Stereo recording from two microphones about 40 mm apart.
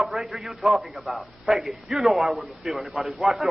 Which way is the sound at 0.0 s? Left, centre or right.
Centre.